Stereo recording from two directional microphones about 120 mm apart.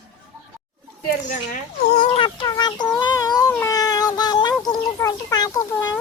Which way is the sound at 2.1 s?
45° left (ahead or behind).